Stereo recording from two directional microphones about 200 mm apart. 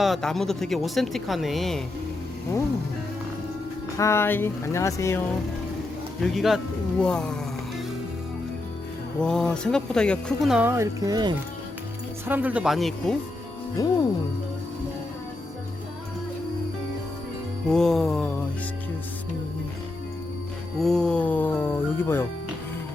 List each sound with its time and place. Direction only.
0.0 s speech: centre (ahead or behind)
3.9 s speech: 15° left (ahead or behind)
6.2 s speech: centre (ahead or behind)
9.2 s speech: 5° left (ahead or behind); by 11.3 s 20° right (ahead or behind)
12.2 s speech: 10° right (ahead or behind)
13.7 s speech: 20° left (ahead or behind)
17.7 s speech: centre (ahead or behind)
20.7 s speech: centre (ahead or behind)